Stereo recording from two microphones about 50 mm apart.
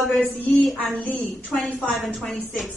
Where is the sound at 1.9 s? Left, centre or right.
Centre.